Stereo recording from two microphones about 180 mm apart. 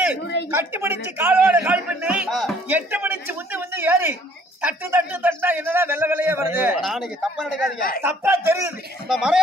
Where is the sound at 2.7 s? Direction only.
10° right (ahead or behind).